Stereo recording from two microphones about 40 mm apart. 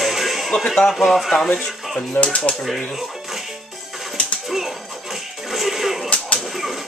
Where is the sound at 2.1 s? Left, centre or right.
Left.